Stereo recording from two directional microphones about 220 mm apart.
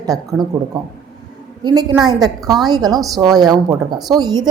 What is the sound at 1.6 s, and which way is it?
A woman's voice, 20° right (ahead or behind).